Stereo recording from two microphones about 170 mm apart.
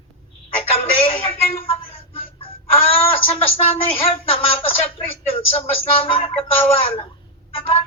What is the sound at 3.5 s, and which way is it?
A woman's voice, 35° left (ahead or behind).